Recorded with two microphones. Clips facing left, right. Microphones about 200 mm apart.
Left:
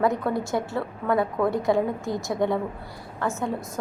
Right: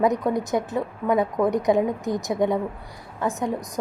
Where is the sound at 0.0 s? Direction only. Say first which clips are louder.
Right 2 dB; 20° right (ahead or behind).